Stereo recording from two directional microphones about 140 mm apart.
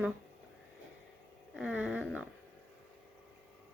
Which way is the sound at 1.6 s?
5° right (ahead or behind).